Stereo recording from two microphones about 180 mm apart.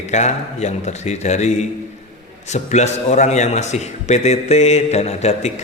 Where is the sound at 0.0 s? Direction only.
40° left (ahead or behind).